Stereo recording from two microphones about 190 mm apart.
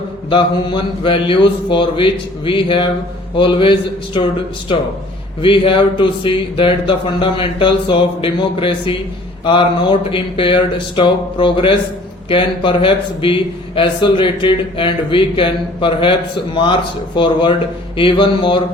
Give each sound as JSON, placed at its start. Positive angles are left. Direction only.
{"t": 0.3, "sound": "a man's voice", "side_deg": 25}
{"t": 5.4, "sound": "a man's voice", "side_deg": 25}